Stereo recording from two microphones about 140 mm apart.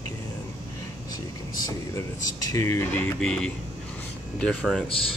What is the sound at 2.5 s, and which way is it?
Speech, 20° left (ahead or behind).